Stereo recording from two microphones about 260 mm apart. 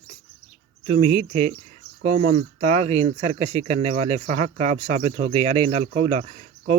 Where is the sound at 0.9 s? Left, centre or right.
Right.